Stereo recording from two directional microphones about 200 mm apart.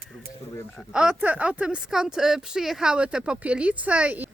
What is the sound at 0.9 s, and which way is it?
A woman's voice, 5° right (ahead or behind).